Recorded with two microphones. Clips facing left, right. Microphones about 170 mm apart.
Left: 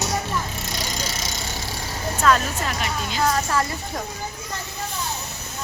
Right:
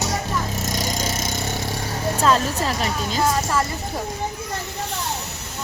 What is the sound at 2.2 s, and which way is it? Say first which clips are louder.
Speech: even; 30° right (ahead or behind).